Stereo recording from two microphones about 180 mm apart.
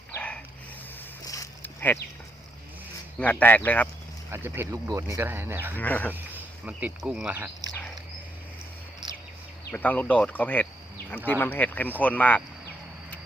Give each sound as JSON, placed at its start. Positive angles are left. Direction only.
{"t": 0.1, "sound": "dog", "side_deg": 5}
{"t": 1.2, "sound": "a sound", "side_deg": 20}
{"t": 3.2, "sound": "speech", "side_deg": 10}
{"t": 4.3, "sound": "speech", "side_deg": -15}
{"t": 5.7, "sound": "speech", "side_deg": 10}
{"t": 6.7, "sound": "speech", "side_deg": -5}
{"t": 9.0, "sound": "bird vocalization", "side_deg": -25}
{"t": 9.7, "sound": "speech", "side_deg": 10}